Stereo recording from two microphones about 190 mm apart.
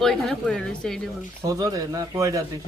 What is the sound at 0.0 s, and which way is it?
Speech, centre (ahead or behind).